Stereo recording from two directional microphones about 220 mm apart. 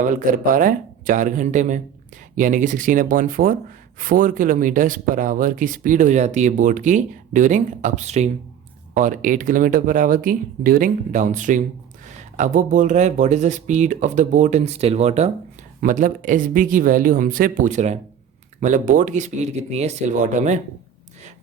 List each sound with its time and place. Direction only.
0.0 s speech: 35° right (ahead or behind)